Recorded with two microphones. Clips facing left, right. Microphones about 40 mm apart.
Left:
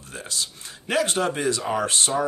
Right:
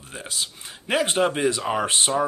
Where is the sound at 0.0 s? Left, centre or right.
Centre.